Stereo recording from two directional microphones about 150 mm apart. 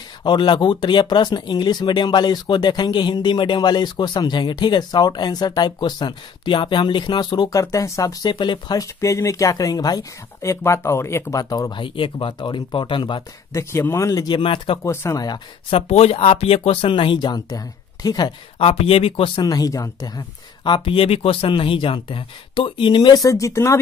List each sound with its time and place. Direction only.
0.2 s speech: 30° left (ahead or behind)
13.5 s speech: 15° left (ahead or behind); by 14.8 s 35° left (ahead or behind)
14.8 s speech: 20° left (ahead or behind)
15.7 s speech: 40° left (ahead or behind); by 18.3 s 25° left (ahead or behind)
18.6 s speech: 40° left (ahead or behind); by 23.8 s 20° left (ahead or behind)